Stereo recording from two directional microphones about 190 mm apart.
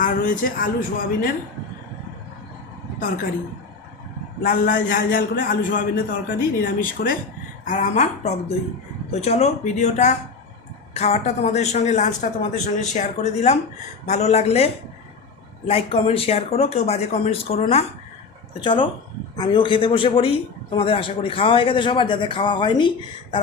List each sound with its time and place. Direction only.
0.0 s speech: 45° left (ahead or behind)
4.4 s a man's voice: 45° left (ahead or behind); by 22.9 s 25° left (ahead or behind)